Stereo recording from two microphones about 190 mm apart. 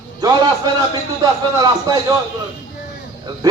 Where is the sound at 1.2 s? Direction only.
20° right (ahead or behind).